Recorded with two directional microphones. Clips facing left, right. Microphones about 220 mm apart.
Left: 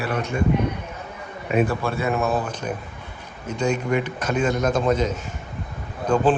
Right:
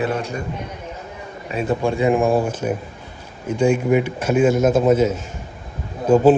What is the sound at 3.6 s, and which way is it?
Speech, 10° right (ahead or behind).